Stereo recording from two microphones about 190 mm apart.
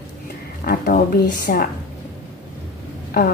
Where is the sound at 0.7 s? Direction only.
55° left (ahead or behind).